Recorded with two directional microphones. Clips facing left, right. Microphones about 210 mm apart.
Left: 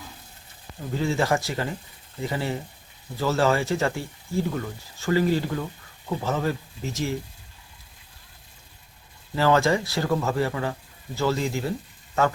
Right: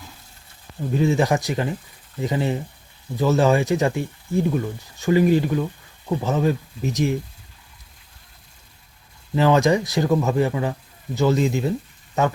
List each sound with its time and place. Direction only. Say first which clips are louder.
0.9 s speech: right 4 dB; 20° right (ahead or behind)
9.3 s speech: right 4 dB; 20° right (ahead or behind)